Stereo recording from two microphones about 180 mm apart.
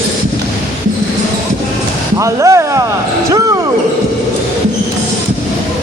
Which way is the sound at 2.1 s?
15° right (ahead or behind).